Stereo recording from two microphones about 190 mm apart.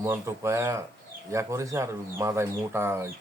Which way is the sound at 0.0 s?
15° right (ahead or behind).